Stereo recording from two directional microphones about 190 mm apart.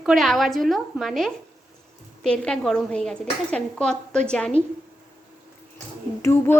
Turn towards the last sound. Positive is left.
turn(degrees=15)  # may be behind; listen again after turning